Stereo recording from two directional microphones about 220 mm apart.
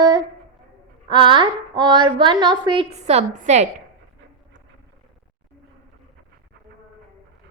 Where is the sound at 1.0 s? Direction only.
20° right (ahead or behind).